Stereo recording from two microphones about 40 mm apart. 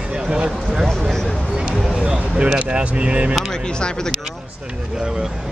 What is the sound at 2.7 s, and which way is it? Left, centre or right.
Speech, right.